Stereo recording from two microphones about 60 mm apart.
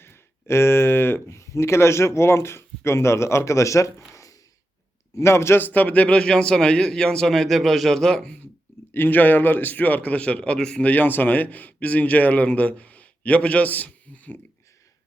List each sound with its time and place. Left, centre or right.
0.0 s speech: left
1.4 s speech: left
4.1 s a sound: left
5.1 s speech: left
5.5 s a man's voice: left; by 8.4 s centre
8.9 s a man's voice: left; by 10.9 s centre
10.9 s a man's voice: left